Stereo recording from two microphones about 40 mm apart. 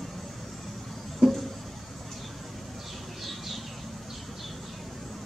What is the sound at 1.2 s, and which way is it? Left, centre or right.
Music, centre.